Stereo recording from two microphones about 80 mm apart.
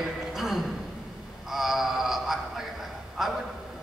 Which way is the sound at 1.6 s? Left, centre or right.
Centre.